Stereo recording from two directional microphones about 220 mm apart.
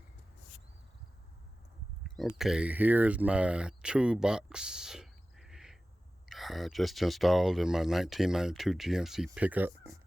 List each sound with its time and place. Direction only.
2.0 s speech: centre (ahead or behind)